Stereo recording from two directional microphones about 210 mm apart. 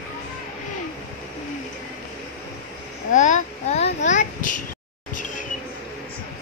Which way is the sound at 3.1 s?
35° left (ahead or behind).